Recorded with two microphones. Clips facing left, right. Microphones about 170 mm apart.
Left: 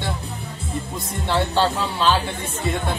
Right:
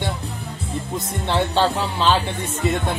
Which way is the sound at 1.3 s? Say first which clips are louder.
Right 1 dB; 20° right (ahead or behind).